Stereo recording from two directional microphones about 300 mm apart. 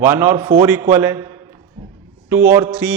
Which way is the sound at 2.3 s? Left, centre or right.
Centre.